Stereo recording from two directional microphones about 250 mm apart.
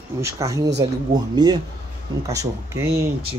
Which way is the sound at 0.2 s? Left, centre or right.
Centre.